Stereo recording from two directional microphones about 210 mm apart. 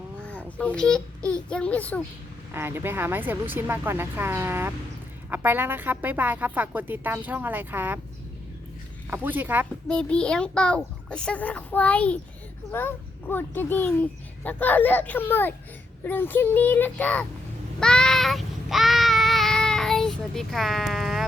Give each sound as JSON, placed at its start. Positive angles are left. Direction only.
{"t": 0.2, "sound": "babbling", "side_deg": 5}
{"t": 1.3, "sound": "a child's voice", "side_deg": 5}
{"t": 2.5, "sound": "a woman's voice", "side_deg": -10}
{"t": 9.0, "sound": "a woman's voice", "side_deg": -10}
{"t": 9.9, "sound": "a child's voice", "side_deg": 5}
{"t": 17.7, "sound": "child singing", "side_deg": 5}